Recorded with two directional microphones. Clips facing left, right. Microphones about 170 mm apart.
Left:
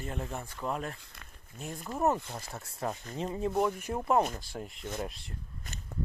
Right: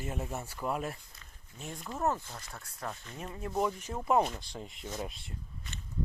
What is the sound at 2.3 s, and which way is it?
Speech, 25° left (ahead or behind).